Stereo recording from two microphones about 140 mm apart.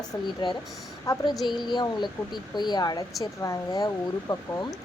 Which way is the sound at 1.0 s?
25° left (ahead or behind).